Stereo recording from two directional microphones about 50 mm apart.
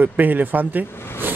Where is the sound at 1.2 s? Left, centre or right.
Right.